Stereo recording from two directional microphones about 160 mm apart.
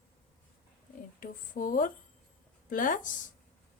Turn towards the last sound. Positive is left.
turn(degrees=55)  # may be behind; listen again after turning